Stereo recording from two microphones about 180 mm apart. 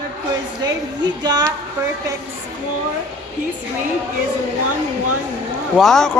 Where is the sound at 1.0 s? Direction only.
25° right (ahead or behind).